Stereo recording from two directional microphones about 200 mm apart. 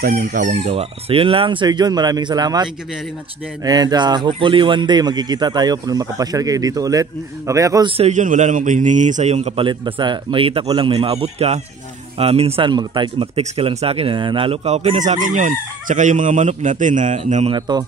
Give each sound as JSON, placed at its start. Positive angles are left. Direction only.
{"t": 0.0, "sound": "speech", "side_deg": -45}
{"t": 7.9, "sound": "speech", "side_deg": -35}
{"t": 17.6, "sound": "speech", "side_deg": -20}